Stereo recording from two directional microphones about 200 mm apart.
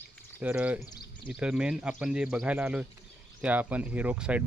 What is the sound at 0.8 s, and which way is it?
Speech, 20° left (ahead or behind).